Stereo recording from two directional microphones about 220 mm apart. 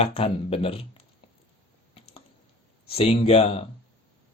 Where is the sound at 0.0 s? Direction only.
25° left (ahead or behind).